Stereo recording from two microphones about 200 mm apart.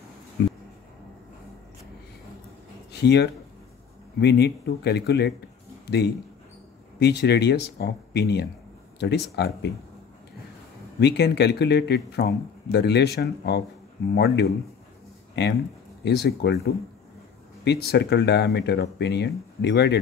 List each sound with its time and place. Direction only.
2.9 s a man's voice: 55° left (ahead or behind)
11.0 s speech: 55° left (ahead or behind)
16.3 s speech: 55° left (ahead or behind)